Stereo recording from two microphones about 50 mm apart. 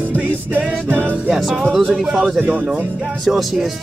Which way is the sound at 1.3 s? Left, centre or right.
Centre.